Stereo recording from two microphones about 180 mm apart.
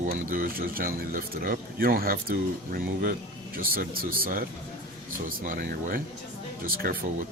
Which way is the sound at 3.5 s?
55° right (ahead or behind).